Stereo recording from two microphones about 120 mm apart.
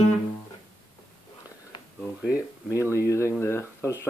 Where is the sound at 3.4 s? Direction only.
20° left (ahead or behind).